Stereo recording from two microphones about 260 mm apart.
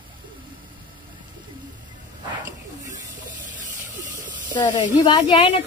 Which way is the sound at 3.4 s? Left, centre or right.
Right.